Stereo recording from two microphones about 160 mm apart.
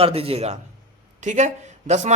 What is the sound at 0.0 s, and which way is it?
A woman's voice, 40° right (ahead or behind).